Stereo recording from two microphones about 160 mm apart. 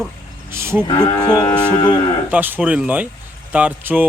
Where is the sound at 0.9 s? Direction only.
25° left (ahead or behind).